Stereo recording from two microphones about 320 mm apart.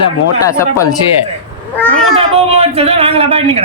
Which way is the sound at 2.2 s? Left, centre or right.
Centre.